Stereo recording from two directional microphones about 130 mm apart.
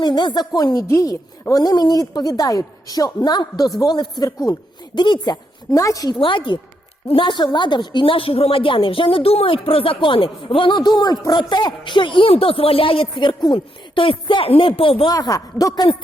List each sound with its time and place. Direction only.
0.0 s a woman's voice: 35° left (ahead or behind)
6.1 s a woman's voice: 40° left (ahead or behind)
15.1 s a woman's voice: 30° left (ahead or behind)